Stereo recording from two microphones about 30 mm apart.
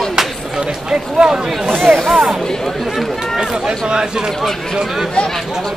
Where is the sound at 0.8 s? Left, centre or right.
Right.